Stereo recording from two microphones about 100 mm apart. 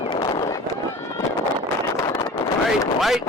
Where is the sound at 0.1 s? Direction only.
45° left (ahead or behind).